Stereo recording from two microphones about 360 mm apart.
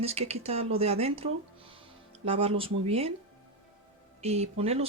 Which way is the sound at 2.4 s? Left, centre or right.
Centre.